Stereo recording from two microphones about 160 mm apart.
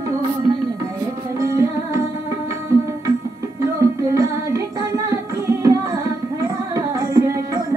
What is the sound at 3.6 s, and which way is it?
Music, 20° right (ahead or behind).